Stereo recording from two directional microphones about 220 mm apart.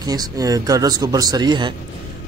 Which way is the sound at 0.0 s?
15° right (ahead or behind).